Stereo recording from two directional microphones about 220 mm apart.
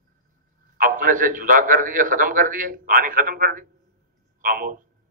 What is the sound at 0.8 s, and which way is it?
A man's voice, 40° right (ahead or behind).